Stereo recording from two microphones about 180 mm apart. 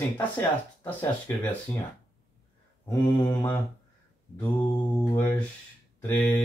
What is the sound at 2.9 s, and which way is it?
Mantra, 20° left (ahead or behind).